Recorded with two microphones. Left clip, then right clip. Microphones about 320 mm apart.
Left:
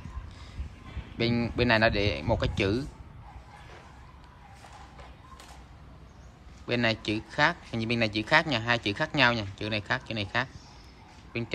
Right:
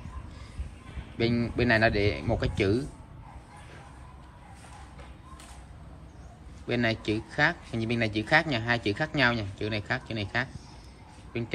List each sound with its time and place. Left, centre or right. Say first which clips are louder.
1.1 s speech: even; centre
6.7 s speech: even; centre